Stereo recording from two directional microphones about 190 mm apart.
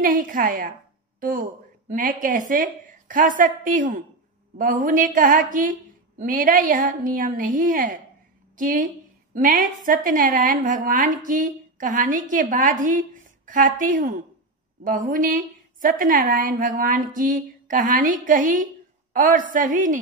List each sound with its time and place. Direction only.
0.0 s a woman's voice: 45° right (ahead or behind)